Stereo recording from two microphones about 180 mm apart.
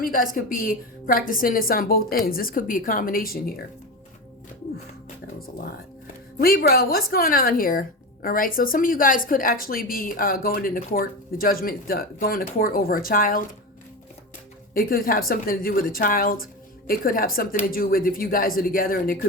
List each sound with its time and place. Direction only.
0.0 s speech: 50° left (ahead or behind)
6.4 s speech: 55° left (ahead or behind)
14.7 s speech: 55° left (ahead or behind)